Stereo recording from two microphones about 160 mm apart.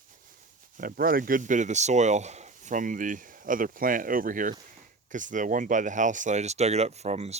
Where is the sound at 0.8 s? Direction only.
60° right (ahead or behind).